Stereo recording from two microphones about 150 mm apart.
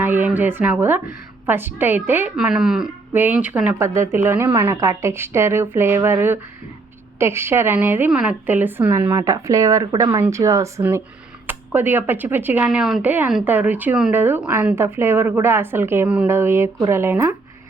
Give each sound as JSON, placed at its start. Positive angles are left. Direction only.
{"t": 0.0, "sound": "speech", "side_deg": -15}
{"t": 10.2, "sound": "speech", "side_deg": -20}